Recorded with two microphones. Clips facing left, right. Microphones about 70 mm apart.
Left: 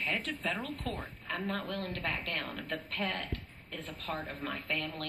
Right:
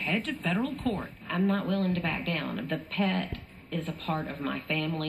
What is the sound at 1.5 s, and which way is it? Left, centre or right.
A woman's voice, right.